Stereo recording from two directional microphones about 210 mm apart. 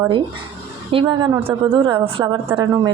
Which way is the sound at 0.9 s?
25° right (ahead or behind).